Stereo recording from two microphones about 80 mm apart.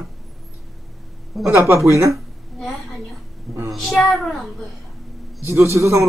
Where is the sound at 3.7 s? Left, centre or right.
Centre.